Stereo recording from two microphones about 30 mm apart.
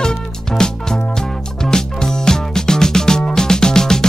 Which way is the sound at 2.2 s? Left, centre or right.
Left.